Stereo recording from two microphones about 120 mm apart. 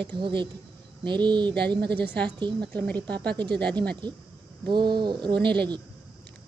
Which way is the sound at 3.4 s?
40° right (ahead or behind).